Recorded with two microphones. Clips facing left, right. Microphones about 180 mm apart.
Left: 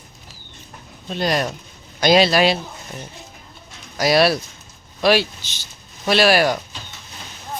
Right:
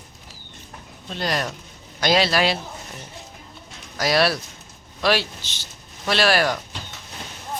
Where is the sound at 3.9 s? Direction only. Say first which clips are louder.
Left 4 dB; 15° left (ahead or behind).